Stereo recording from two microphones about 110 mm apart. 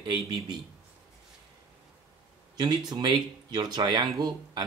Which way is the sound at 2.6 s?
40° right (ahead or behind).